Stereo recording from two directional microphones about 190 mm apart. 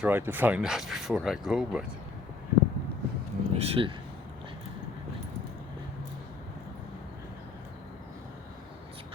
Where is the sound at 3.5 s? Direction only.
30° right (ahead or behind).